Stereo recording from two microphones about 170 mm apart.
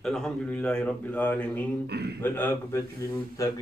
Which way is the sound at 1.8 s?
75° right (ahead or behind).